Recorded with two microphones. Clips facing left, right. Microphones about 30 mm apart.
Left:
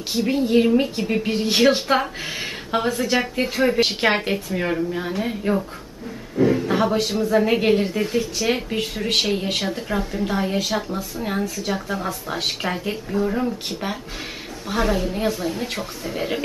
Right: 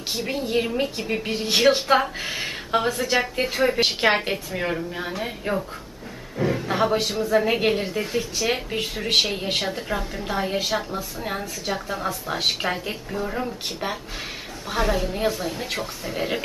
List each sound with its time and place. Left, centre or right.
0.1 s a woman's voice: centre